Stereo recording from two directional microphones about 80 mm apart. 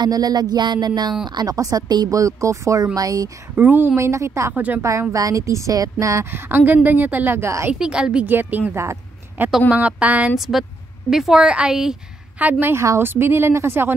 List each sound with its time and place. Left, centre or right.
0.0 s a sound: right
2.1 s speech: right
3.5 s a woman's voice: right
3.9 s speech: right
4.6 s a woman's voice: centre
5.1 s speech: right
6.5 s a woman's voice: right
7.8 s a woman's voice: centre
8.3 s a woman's voice: right
10.3 s a woman's voice: centre
12.4 s a woman's voice: right